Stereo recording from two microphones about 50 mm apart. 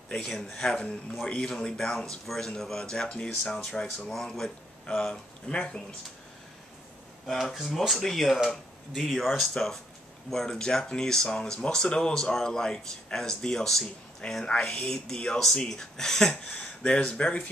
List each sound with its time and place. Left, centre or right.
0.4 s speech: centre
7.5 s speech: centre
16.4 s speech: left